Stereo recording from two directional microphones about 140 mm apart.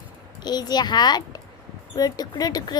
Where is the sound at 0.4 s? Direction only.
30° left (ahead or behind).